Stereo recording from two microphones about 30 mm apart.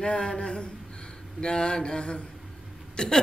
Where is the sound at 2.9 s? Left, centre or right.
Left.